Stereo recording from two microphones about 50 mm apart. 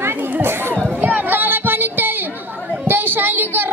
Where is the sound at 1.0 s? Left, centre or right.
Right.